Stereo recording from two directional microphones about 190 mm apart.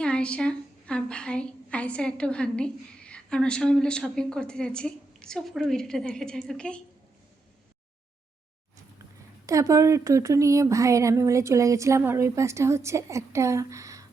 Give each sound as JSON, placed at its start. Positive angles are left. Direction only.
{"t": 0.0, "sound": "a woman's voice", "side_deg": 5}
{"t": 9.5, "sound": "speech", "side_deg": -15}